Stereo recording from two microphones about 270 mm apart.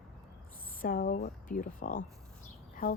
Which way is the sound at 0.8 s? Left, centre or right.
Left.